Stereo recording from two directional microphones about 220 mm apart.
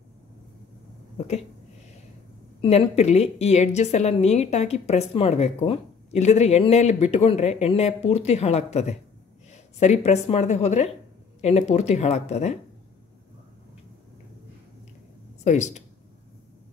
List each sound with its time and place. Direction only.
1.1 s speech: 30° left (ahead or behind)
2.6 s a woman's voice: 25° left (ahead or behind)
15.4 s speech: 30° left (ahead or behind)